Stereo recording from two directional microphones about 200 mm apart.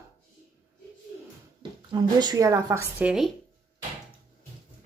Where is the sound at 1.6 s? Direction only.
20° right (ahead or behind); by 3.3 s 5° right (ahead or behind).